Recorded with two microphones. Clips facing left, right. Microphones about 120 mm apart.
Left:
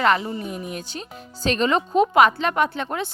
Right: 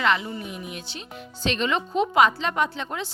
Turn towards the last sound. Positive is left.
turn(degrees=55)  # may be behind; listen again after turning